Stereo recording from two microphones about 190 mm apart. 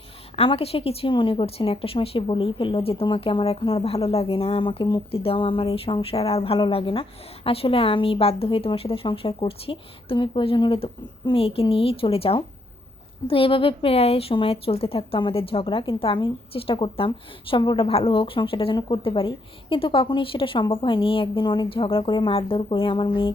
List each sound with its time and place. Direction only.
0.3 s a woman's voice: 30° left (ahead or behind)